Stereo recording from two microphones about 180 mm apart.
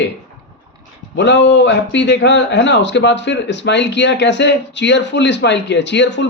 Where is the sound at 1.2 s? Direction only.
80° left.